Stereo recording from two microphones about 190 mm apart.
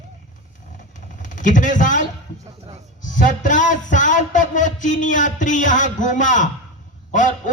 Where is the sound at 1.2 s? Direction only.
40° left (ahead or behind).